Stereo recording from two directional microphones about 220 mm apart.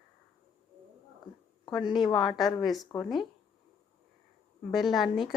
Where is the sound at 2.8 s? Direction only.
15° left (ahead or behind).